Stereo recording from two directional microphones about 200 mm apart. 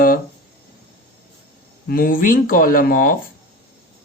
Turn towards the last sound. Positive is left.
turn(degrees=45)  # may be behind; listen again after turning